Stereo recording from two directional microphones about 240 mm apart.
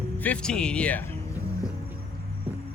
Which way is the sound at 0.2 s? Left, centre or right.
Centre.